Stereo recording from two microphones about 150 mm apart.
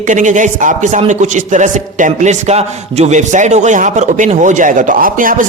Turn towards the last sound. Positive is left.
turn(degrees=-65)  # may be behind; listen again after turning